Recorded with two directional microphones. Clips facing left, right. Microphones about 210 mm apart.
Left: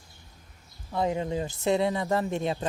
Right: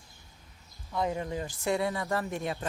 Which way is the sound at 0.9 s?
25° left (ahead or behind).